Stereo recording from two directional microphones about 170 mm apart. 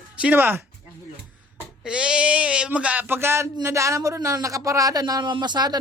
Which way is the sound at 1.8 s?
5° right (ahead or behind).